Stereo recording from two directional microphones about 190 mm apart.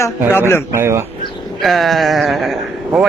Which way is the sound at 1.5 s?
Centre (ahead or behind).